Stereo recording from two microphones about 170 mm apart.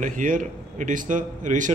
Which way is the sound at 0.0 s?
50° right (ahead or behind).